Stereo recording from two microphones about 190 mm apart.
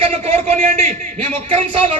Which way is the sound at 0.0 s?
30° right (ahead or behind).